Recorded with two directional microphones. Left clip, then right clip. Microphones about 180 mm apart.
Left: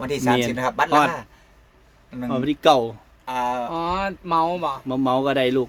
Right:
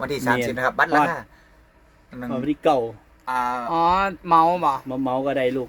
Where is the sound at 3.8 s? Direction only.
25° right (ahead or behind).